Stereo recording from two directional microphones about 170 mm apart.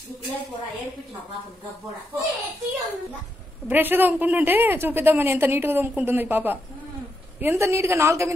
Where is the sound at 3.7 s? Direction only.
10° right (ahead or behind).